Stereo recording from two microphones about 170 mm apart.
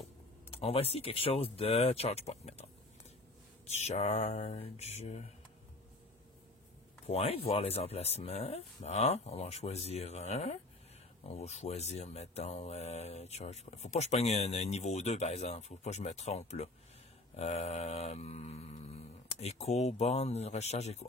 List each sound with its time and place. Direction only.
0.5 s speech: 35° left (ahead or behind)
3.8 s speech: 40° left (ahead or behind)
7.1 s speech: 35° left (ahead or behind)
17.4 s a sound: 35° left (ahead or behind)